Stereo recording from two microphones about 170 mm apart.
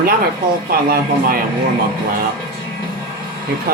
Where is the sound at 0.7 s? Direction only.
60° right (ahead or behind).